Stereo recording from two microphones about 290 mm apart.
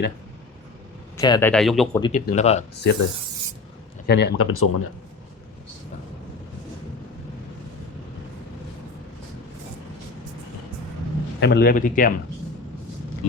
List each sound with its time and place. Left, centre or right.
1.1 s speech: centre
2.0 s a man's voice: centre
2.8 s rub: left
4.0 s speech: left
11.3 s a man's voice: left